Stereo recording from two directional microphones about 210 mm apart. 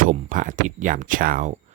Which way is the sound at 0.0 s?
40° right (ahead or behind).